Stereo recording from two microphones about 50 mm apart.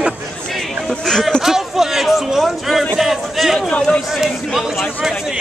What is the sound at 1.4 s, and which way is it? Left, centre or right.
Speech, centre.